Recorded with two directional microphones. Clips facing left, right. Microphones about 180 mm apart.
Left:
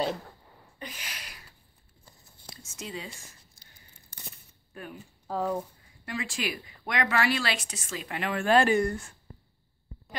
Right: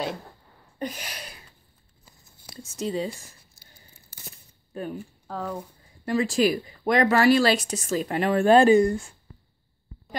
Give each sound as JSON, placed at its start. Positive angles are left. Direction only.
{"t": 0.7, "sound": "a sound", "side_deg": -40}
{"t": 2.5, "sound": "speech", "side_deg": -35}
{"t": 4.7, "sound": "speech", "side_deg": -30}
{"t": 5.2, "sound": "speech", "side_deg": 10}
{"t": 6.0, "sound": "speech", "side_deg": -40}
{"t": 8.7, "sound": "speech", "side_deg": -20}
{"t": 9.3, "sound": "a sound", "side_deg": 40}